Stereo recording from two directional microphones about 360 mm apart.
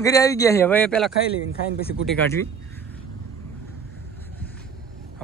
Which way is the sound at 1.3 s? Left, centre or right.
Left.